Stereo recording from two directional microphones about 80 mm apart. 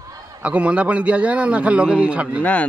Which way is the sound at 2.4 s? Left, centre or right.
Centre.